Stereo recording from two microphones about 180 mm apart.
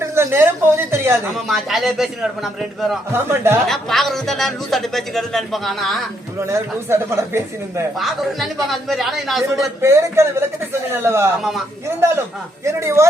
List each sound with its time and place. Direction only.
0.0 s a woman's voice: 15° right (ahead or behind)
1.3 s a man's voice: centre (ahead or behind)
3.1 s speech: 15° right (ahead or behind)
3.7 s a man's voice: centre (ahead or behind)
6.4 s speech: 15° right (ahead or behind)
7.9 s a man's voice: centre (ahead or behind)
9.8 s speech: 15° right (ahead or behind)
11.3 s a man's voice: centre (ahead or behind)
11.9 s speech: 15° right (ahead or behind)